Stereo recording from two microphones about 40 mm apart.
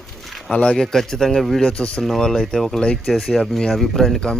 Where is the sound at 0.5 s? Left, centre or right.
Left.